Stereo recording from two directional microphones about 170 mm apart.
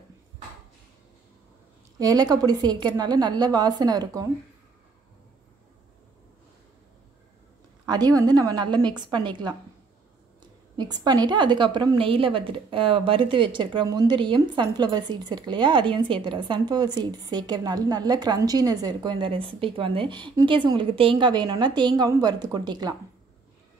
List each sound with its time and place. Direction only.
2.0 s a woman's voice: 20° right (ahead or behind)
7.8 s a woman's voice: 25° right (ahead or behind)